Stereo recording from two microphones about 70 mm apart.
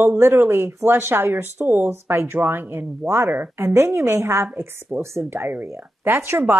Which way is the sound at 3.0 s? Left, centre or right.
Right.